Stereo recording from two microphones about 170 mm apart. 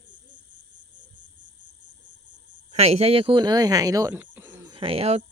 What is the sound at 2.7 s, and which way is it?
Speech, 40° right (ahead or behind).